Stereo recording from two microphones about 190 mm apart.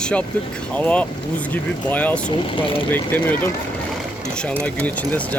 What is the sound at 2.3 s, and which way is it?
Speech, 25° left (ahead or behind).